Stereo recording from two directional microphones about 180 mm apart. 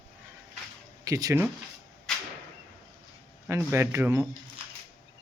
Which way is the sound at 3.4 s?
10° right (ahead or behind).